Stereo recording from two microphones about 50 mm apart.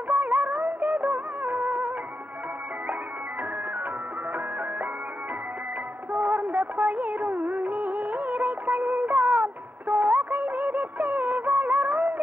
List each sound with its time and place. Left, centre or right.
0.1 s music: right
6.1 s music of bollywood: right